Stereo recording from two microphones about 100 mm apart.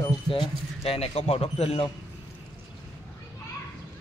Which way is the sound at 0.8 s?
90° left.